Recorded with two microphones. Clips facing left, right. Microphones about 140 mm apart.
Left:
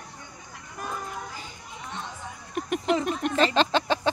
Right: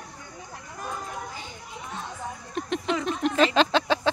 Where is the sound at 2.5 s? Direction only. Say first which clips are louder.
Left 3 dB; 10° left (ahead or behind).